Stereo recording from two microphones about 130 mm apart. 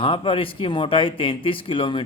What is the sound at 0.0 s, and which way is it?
Speech, 40° left (ahead or behind).